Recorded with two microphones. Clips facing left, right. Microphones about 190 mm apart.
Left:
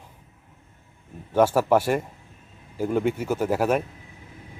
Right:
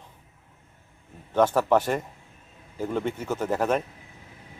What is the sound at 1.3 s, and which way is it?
Speech, 10° left (ahead or behind).